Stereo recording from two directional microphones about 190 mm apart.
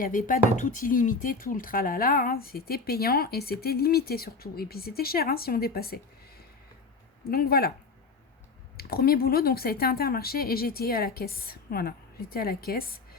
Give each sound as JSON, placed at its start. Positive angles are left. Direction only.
{"t": 0.0, "sound": "speech", "side_deg": 45}
{"t": 7.3, "sound": "speech", "side_deg": 50}
{"t": 8.8, "sound": "speech", "side_deg": 50}